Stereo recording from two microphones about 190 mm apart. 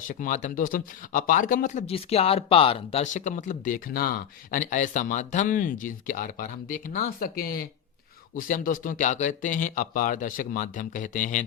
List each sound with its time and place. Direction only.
0.1 s speech: 40° left (ahead or behind)